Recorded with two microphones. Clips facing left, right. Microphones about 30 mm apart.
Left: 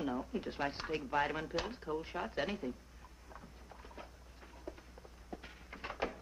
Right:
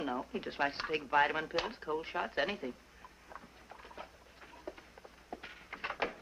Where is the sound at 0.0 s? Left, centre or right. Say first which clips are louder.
Right 1 dB; right.